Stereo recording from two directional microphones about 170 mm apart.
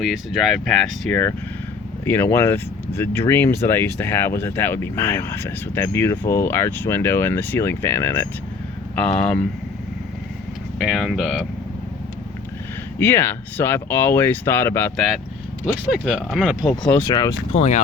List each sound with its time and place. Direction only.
0.0 s speech: centre (ahead or behind)
10.8 s speech: centre (ahead or behind)
13.0 s speech: 10° left (ahead or behind)
15.9 s speech: 5° right (ahead or behind)
17.0 s speech: 25° left (ahead or behind)
17.5 s speech: 40° left (ahead or behind)